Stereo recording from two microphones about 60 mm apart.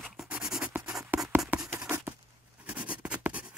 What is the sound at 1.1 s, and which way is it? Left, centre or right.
Writing, right.